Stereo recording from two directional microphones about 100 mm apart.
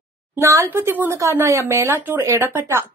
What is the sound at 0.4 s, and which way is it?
A woman's voice, 30° right (ahead or behind).